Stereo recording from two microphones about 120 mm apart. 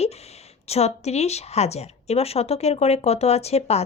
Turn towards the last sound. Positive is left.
turn(degrees=60)  # may be behind; listen again after turning